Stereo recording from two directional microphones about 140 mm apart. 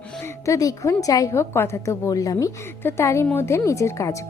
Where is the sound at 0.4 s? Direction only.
25° left (ahead or behind).